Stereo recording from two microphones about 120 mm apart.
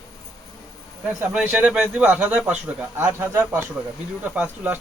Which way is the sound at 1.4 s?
10° right (ahead or behind).